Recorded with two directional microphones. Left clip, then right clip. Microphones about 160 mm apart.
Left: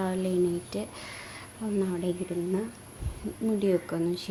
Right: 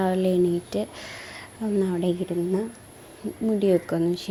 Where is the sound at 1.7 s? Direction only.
30° right (ahead or behind).